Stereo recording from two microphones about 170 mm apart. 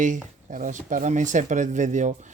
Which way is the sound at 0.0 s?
50° right (ahead or behind).